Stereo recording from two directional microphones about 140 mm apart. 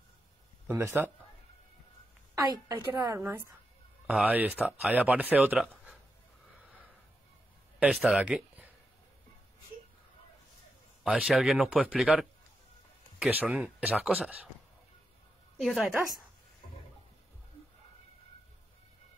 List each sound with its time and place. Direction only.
0.7 s speech: 15° right (ahead or behind)
2.7 s speech: 20° right (ahead or behind); by 5.9 s 5° right (ahead or behind)
7.9 s speech: centre (ahead or behind)
11.1 s speech: 5° right (ahead or behind)
15.5 s a woman's voice: centre (ahead or behind)